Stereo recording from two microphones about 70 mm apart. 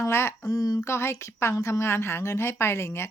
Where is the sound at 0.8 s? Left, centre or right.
Left.